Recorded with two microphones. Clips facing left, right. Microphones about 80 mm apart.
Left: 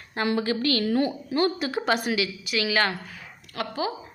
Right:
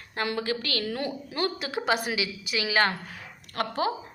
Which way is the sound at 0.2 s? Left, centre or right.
Centre.